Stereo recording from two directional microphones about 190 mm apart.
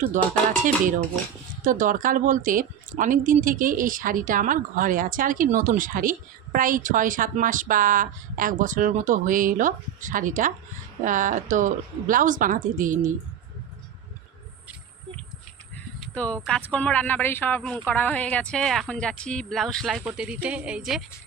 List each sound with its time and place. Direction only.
0.2 s a sound: 40° right (ahead or behind)
1.6 s a woman's voice: 45° right (ahead or behind)
16.0 s speech: 5° left (ahead or behind)